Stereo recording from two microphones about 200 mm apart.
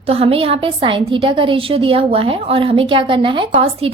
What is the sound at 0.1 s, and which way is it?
A woman's voice, 30° right (ahead or behind).